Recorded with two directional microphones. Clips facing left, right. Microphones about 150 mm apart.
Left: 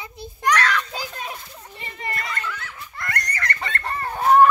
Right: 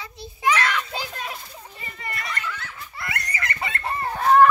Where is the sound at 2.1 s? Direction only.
Centre (ahead or behind).